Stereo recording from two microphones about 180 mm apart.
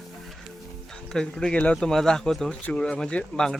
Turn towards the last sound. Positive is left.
turn(degrees=5)  # may be behind; listen again after turning